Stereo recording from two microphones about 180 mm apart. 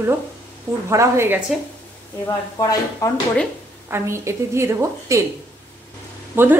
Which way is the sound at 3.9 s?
15° right (ahead or behind).